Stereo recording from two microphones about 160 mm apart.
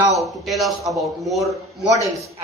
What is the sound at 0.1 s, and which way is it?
A man's voice, centre (ahead or behind).